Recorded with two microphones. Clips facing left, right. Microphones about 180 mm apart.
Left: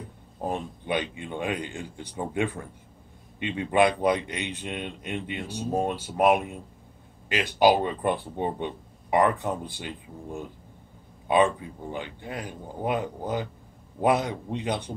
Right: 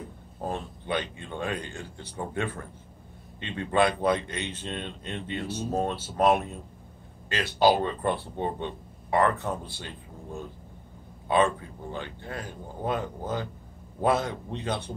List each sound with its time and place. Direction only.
0.4 s a man's voice: 15° left (ahead or behind)